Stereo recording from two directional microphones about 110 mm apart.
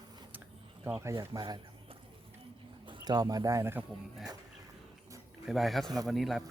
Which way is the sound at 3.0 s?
35° right (ahead or behind).